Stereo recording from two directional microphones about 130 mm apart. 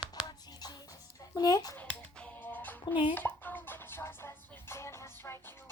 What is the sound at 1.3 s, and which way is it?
Speech, 30° left (ahead or behind).